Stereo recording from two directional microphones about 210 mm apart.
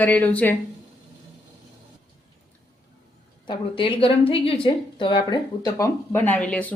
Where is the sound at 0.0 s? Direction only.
5° left (ahead or behind).